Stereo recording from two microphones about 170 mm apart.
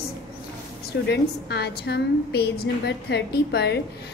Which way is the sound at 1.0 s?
75° left (ahead or behind).